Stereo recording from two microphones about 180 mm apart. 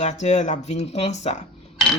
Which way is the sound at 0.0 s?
40° left (ahead or behind).